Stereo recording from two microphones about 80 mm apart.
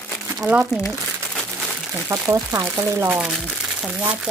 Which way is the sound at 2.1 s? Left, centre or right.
Right.